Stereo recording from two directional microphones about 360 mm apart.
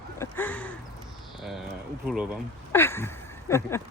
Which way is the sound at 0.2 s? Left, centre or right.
Centre.